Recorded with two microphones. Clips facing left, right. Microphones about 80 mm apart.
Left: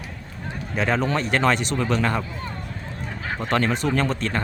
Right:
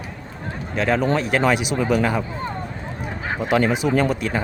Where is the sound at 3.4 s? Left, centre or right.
Centre.